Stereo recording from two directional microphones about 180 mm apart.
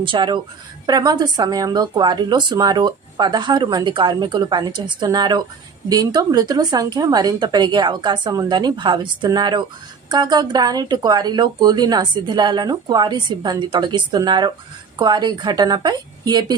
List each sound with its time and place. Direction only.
0.0 s speech: 25° right (ahead or behind)